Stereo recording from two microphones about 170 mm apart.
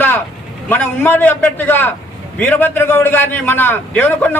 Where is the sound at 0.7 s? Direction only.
10° left (ahead or behind).